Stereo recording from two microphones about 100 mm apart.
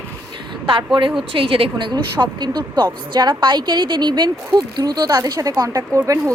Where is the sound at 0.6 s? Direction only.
55° right (ahead or behind).